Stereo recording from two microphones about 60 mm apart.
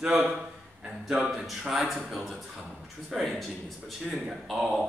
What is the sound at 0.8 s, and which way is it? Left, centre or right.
Speech, centre.